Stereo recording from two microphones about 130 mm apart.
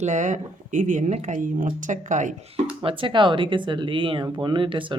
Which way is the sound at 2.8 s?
40° right (ahead or behind).